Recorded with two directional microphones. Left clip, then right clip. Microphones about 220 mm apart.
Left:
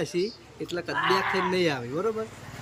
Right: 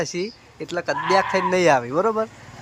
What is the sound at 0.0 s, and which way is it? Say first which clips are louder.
Speech: right 2 dB; 10° right (ahead or behind).